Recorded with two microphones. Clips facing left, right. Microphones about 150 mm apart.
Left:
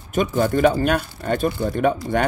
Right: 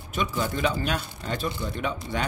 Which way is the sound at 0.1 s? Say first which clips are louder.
Left 9 dB; 50° left (ahead or behind).